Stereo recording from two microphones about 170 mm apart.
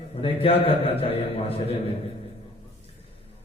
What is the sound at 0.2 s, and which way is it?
A man's voice, 35° left (ahead or behind).